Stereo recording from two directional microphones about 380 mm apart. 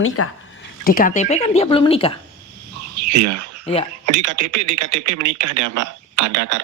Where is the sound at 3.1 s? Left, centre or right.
Right.